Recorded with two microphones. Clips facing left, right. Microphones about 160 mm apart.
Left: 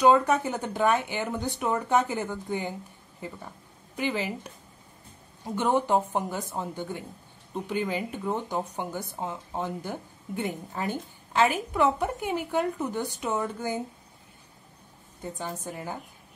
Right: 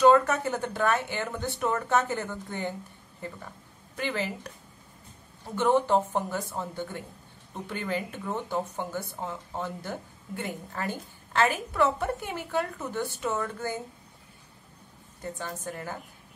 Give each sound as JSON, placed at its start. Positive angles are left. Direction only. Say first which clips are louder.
{"t": 0.0, "sound": "speech", "louder": "even", "side_deg": 15}
{"t": 3.9, "sound": "speech", "louder": "left 2 dB", "side_deg": 15}
{"t": 15.2, "sound": "speech", "louder": "left 1 dB", "side_deg": 15}